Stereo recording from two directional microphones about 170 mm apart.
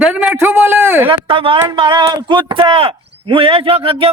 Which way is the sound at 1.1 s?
30° right (ahead or behind).